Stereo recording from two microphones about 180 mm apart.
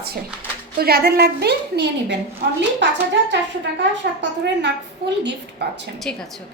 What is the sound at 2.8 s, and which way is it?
A woman's voice, 80° right.